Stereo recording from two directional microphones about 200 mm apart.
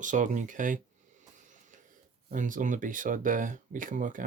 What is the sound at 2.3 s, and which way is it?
Speech, 40° right (ahead or behind).